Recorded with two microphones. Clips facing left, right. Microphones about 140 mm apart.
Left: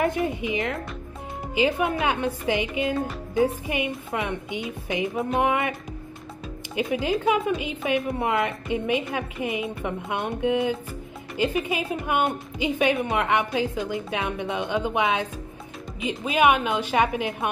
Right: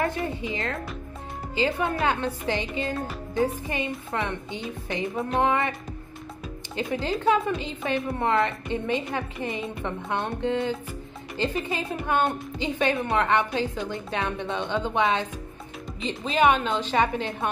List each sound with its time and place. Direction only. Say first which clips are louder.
0.0 s a woman's voice: left 3 dB; 15° left (ahead or behind)
2.9 s music: left 3 dB; centre (ahead or behind)
3.6 s a woman's voice: left 2 dB; 15° left (ahead or behind)
5.0 s speech: left 1 dB; centre (ahead or behind)
6.7 s a woman's voice: left 3 dB; 10° left (ahead or behind)